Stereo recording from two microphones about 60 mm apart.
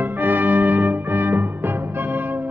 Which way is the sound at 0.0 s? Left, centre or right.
Right.